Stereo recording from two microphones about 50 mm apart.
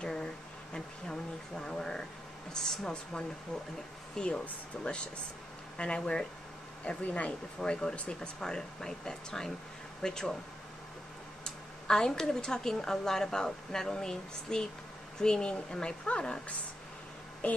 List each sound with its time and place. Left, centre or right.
0.0 s a sound: centre
2.5 s a woman's voice: centre
6.8 s a woman's voice: left; by 10.3 s centre
11.4 s a woman's voice: centre